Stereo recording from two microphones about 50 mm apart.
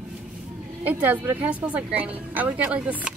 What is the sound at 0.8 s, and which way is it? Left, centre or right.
Speech, right.